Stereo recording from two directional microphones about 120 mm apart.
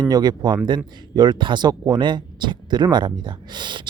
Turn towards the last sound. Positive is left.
turn(degrees=-40)  # may be behind; listen again after turning